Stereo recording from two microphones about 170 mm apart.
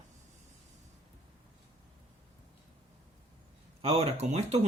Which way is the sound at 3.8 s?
35° right (ahead or behind).